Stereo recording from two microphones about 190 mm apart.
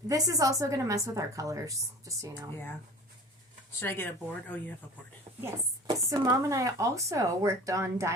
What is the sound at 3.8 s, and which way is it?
Speech, 10° left (ahead or behind).